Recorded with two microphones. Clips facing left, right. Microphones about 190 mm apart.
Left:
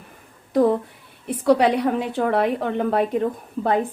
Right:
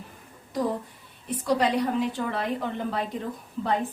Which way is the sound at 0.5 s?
60° left (ahead or behind).